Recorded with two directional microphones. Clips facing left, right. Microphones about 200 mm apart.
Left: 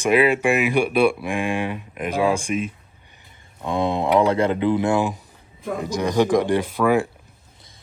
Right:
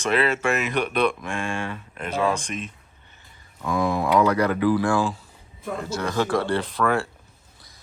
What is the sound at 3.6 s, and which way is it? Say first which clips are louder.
Speech: left 1 dB; 25° left (ahead or behind).